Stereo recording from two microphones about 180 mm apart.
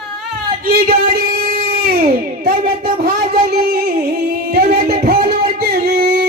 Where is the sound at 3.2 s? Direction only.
55° right (ahead or behind).